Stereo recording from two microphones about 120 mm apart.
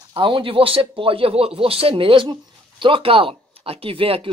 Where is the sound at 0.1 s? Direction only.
45° right (ahead or behind).